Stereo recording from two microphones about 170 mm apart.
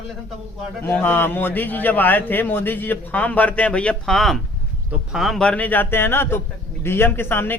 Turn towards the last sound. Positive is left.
turn(degrees=15)  # may be behind; listen again after turning